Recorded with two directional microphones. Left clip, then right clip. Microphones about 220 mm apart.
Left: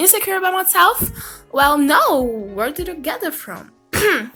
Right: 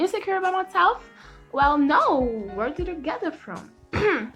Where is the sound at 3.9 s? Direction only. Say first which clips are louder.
Left 6 dB; 20° left (ahead or behind).